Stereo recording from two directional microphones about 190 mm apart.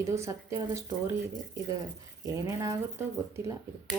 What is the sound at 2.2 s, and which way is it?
Speech, 20° right (ahead or behind).